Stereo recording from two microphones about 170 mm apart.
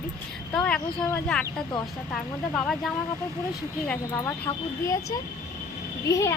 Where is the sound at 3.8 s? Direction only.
10° left (ahead or behind).